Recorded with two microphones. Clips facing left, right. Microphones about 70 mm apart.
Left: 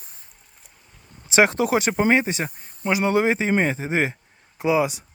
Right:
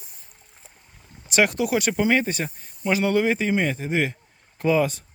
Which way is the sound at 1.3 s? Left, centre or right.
Left.